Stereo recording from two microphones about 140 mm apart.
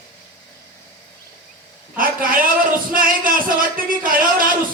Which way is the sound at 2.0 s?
90° right.